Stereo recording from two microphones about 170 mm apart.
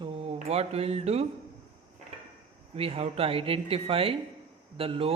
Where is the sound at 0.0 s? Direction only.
35° right (ahead or behind).